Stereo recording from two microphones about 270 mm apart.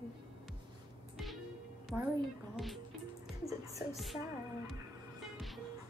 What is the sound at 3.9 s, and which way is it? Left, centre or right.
Speech, centre.